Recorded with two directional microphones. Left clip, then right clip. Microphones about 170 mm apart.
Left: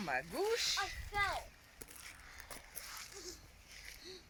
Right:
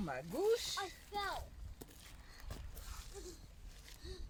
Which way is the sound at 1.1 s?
35° right (ahead or behind).